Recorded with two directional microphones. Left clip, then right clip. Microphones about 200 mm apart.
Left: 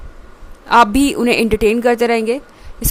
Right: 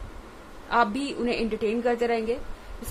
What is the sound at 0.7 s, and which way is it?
A woman's voice, 55° left (ahead or behind).